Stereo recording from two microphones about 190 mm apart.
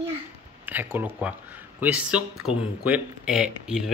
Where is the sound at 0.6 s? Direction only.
10° right (ahead or behind).